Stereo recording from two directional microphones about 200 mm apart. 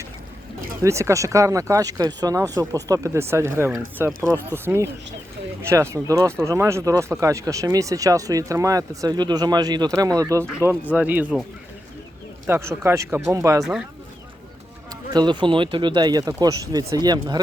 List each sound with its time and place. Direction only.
0.8 s speech: 15° right (ahead or behind)
12.5 s speech: 10° right (ahead or behind)
15.1 s speech: 20° right (ahead or behind)